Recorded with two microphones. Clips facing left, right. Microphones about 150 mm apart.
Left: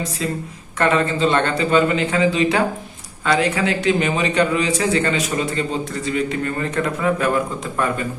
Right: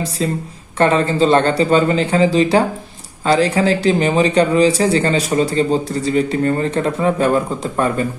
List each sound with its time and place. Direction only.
0.2 s speech: 30° right (ahead or behind)